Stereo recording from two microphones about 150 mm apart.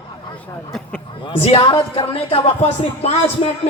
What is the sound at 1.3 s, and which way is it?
Speech, 40° left (ahead or behind).